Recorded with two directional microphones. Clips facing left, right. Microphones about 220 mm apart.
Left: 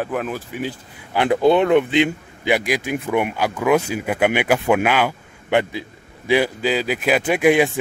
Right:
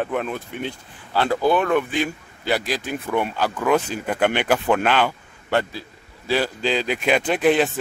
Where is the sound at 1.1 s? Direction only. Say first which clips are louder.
Left 4 dB; 20° left (ahead or behind).